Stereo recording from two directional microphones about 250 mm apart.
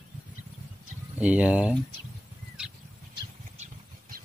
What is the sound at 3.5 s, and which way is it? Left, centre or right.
Vehicle, right.